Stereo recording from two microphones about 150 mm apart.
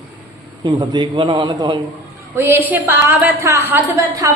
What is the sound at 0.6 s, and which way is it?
A woman's voice, 30° right (ahead or behind).